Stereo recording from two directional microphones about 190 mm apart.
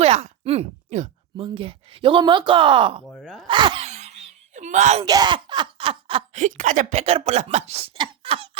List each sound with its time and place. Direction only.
0.0 s a sound: 30° right (ahead or behind)
1.5 s speech: 30° right (ahead or behind)
3.1 s speech: centre (ahead or behind)
3.4 s speech: 25° right (ahead or behind)
3.8 s a sound: 35° right (ahead or behind)
5.0 s speech: 20° right (ahead or behind)
6.4 s speech: 40° right (ahead or behind)